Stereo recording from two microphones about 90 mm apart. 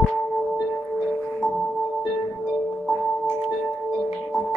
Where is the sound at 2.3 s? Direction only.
5° left (ahead or behind).